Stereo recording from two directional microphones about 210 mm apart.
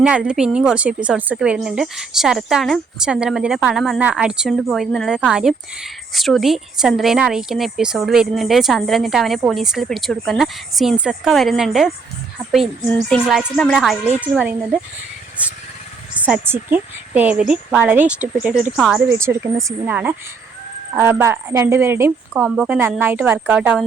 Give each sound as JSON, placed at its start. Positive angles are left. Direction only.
{"t": 0.0, "sound": "a woman's voice", "side_deg": -5}
{"t": 13.1, "sound": "a woman's voice", "side_deg": 0}
{"t": 16.1, "sound": "a woman's voice", "side_deg": -5}
{"t": 19.0, "sound": "a woman's voice", "side_deg": -10}